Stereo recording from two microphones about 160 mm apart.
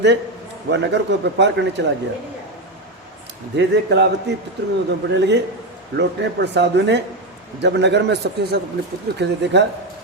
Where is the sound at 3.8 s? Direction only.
90° right.